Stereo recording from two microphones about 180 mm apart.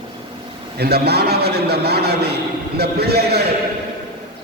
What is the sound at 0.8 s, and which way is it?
A man's voice, 65° right (ahead or behind).